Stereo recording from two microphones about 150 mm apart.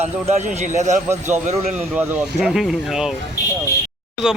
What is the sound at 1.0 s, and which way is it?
A man's voice, 15° right (ahead or behind).